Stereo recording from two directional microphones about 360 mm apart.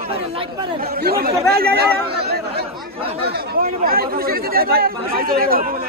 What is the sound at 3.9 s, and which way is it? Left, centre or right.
Speech, right.